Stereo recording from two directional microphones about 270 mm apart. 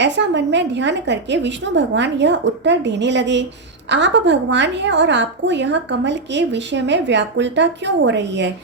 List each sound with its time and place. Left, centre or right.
0.0 s a woman's voice: right